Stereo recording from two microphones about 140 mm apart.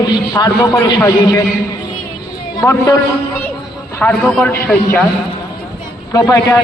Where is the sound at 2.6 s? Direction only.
20° left (ahead or behind).